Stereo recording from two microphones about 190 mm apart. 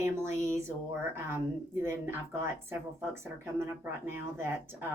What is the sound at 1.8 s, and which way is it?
Speech, 15° right (ahead or behind).